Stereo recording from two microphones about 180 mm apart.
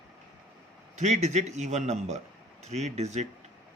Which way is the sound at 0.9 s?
40° right (ahead or behind).